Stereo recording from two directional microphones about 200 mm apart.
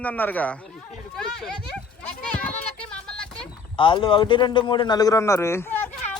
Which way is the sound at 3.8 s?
25° left (ahead or behind).